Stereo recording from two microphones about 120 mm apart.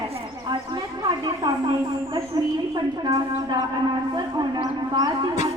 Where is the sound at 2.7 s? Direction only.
35° right (ahead or behind).